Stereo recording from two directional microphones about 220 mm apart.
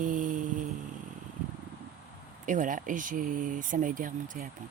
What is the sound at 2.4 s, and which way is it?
Speech, 35° right (ahead or behind).